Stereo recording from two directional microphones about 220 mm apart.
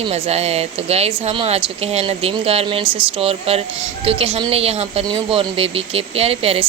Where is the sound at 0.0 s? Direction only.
30° right (ahead or behind).